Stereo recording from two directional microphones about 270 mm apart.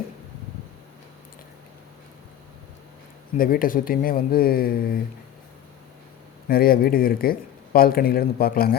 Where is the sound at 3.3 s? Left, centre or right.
Left.